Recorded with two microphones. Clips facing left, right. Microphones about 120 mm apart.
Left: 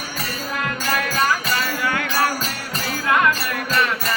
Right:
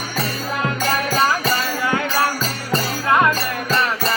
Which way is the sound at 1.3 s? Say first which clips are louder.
Right 2 dB; 25° right (ahead or behind).